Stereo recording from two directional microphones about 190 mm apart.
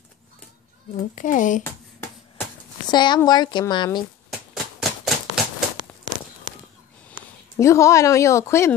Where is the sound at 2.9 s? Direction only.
25° left (ahead or behind).